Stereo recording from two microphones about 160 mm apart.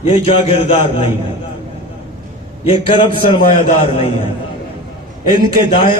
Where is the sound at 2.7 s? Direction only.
30° left (ahead or behind).